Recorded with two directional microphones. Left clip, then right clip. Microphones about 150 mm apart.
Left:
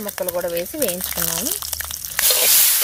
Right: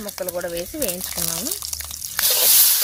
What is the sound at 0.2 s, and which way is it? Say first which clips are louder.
Frying: left 4 dB; 25° left (ahead or behind).